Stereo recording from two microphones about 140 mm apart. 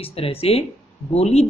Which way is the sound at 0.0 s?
45° left (ahead or behind).